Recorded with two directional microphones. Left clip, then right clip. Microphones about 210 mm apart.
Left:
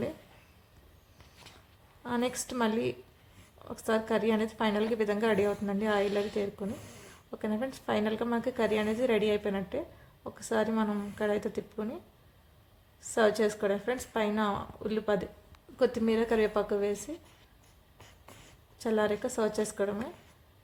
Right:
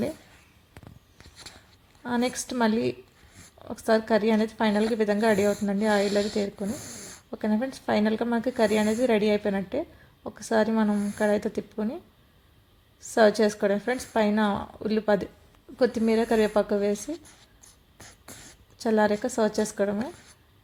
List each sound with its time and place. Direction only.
2.0 s a woman's voice: 25° right (ahead or behind)
13.0 s a woman's voice: 25° right (ahead or behind)
18.8 s a woman's voice: 25° right (ahead or behind)